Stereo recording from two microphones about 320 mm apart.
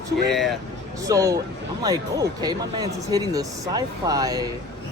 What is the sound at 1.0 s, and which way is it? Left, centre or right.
Speech, centre.